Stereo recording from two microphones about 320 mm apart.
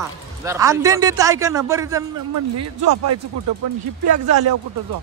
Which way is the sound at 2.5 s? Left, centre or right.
Right.